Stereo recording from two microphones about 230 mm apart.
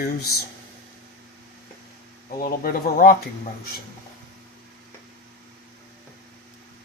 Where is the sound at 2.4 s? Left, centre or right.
Left.